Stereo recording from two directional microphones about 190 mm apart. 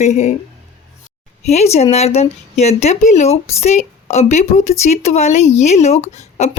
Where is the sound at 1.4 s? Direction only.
35° left (ahead or behind).